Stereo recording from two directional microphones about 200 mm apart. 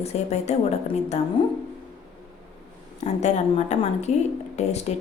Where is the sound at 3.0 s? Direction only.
35° left (ahead or behind).